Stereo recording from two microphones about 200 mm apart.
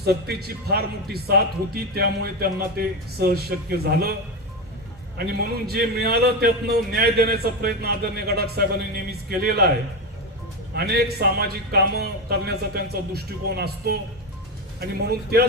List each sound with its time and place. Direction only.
0.0 s a man's voice: 50° right (ahead or behind)
10.8 s a man's voice: 50° right (ahead or behind)